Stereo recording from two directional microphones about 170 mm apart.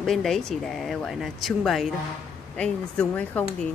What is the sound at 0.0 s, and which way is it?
Speech, centre (ahead or behind).